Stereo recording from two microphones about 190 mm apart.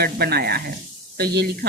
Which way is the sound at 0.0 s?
55° right (ahead or behind).